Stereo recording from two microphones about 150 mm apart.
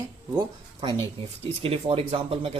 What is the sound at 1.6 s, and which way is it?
Speech, 40° right (ahead or behind).